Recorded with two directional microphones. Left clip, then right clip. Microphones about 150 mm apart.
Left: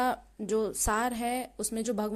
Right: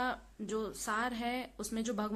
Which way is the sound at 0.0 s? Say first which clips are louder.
Left 7 dB; 50° left (ahead or behind).